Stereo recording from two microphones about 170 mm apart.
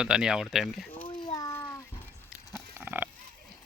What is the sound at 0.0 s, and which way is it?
Speech, 5° right (ahead or behind).